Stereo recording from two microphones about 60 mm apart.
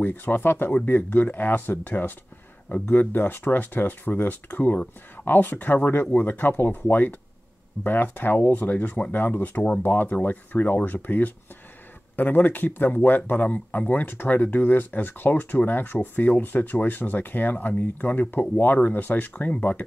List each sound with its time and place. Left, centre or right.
0.0 s speech: left